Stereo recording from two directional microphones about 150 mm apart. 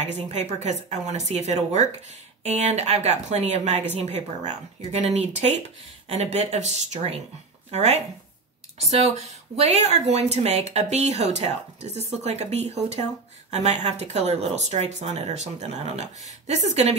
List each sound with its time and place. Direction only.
0.0 s speech: 50° right (ahead or behind)